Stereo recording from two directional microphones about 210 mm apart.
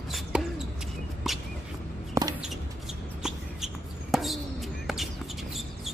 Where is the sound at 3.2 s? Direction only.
Centre (ahead or behind).